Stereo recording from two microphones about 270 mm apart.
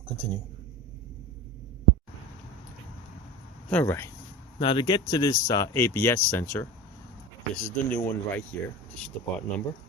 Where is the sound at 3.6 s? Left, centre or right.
Centre.